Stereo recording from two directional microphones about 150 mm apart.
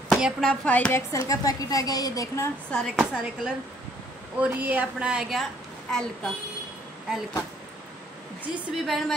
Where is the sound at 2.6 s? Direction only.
5° left (ahead or behind).